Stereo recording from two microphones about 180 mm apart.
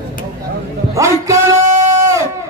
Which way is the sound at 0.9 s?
15° right (ahead or behind).